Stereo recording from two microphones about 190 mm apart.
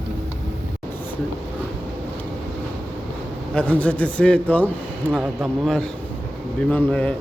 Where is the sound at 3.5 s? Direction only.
5° left (ahead or behind).